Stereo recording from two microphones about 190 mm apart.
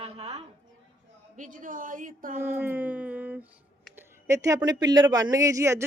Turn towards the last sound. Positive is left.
turn(degrees=-15)  # may be behind; listen again after turning